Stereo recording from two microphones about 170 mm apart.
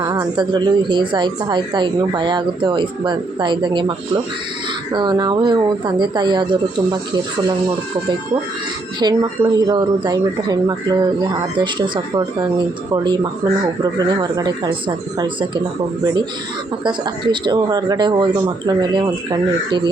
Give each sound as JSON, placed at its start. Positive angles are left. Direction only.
{"t": 0.0, "sound": "a woman's voice", "side_deg": -25}
{"t": 9.0, "sound": "a woman's voice", "side_deg": -20}
{"t": 16.8, "sound": "a woman's voice", "side_deg": -25}